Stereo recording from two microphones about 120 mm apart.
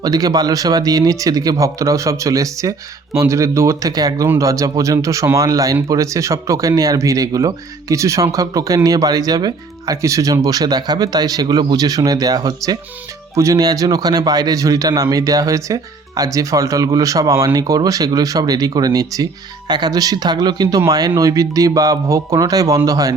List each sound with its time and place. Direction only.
0.0 s speech: 30° right (ahead or behind)